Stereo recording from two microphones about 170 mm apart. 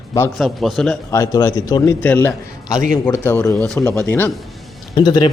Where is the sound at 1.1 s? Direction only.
15° left (ahead or behind).